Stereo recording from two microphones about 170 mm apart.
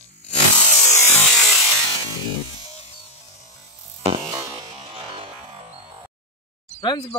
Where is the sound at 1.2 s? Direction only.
5° left (ahead or behind).